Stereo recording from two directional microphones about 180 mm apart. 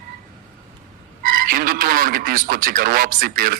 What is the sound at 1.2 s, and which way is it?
A man's voice, 50° right (ahead or behind).